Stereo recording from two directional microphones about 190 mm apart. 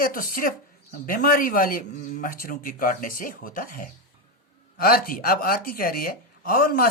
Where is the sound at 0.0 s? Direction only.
50° left (ahead or behind).